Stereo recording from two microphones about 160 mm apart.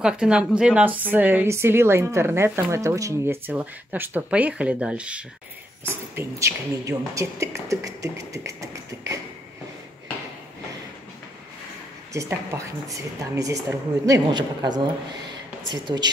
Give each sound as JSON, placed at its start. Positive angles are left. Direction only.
{"t": 0.0, "sound": "a woman's voice", "side_deg": -5}
{"t": 6.1, "sound": "speech", "side_deg": -20}
{"t": 12.1, "sound": "speech", "side_deg": -20}
{"t": 15.7, "sound": "speech", "side_deg": -25}